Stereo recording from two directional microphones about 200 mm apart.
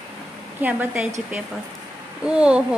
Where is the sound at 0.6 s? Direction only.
5° right (ahead or behind).